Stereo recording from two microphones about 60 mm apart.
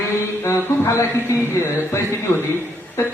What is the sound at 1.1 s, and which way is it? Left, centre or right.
A man's voice, left.